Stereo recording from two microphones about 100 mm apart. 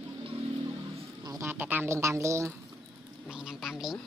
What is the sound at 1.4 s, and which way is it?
Speech, 20° right (ahead or behind).